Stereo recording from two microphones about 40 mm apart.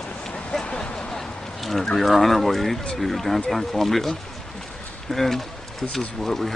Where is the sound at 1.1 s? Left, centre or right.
Centre.